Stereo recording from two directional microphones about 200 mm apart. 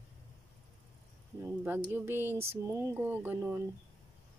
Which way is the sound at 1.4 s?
10° right (ahead or behind).